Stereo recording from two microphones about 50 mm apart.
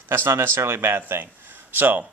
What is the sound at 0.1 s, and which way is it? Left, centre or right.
A man's voice, right.